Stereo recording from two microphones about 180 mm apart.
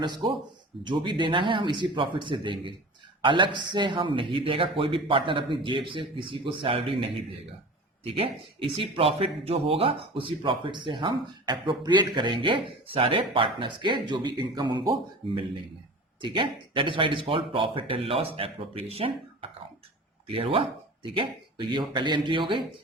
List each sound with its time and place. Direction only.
0.0 s speech: 25° right (ahead or behind)
8.0 s speech: 30° right (ahead or behind)
16.2 s speech: 25° right (ahead or behind)